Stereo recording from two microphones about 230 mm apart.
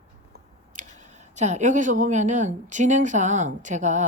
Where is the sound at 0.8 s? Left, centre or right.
Right.